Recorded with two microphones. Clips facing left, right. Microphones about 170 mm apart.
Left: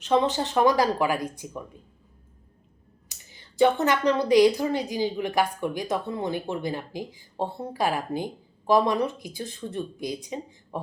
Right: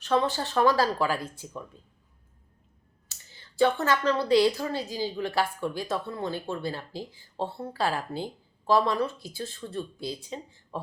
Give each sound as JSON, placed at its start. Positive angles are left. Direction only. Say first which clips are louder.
{"t": 0.0, "sound": "speech", "louder": "left 3 dB", "side_deg": 20}
{"t": 3.1, "sound": "speech", "louder": "left 1 dB", "side_deg": 15}